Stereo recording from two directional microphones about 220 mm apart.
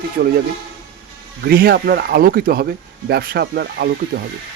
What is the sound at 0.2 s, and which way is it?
Speech, 45° right (ahead or behind).